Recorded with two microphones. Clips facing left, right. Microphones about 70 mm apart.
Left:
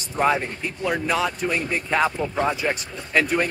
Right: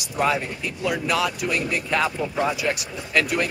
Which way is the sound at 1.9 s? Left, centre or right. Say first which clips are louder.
Left 2 dB; centre.